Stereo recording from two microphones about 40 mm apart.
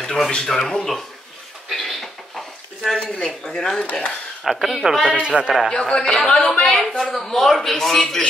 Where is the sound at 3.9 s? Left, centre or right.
Left.